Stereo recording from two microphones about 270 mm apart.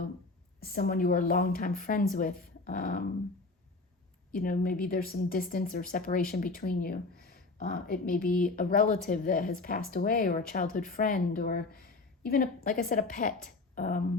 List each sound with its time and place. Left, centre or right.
0.6 s speech: left
4.3 s a woman's voice: left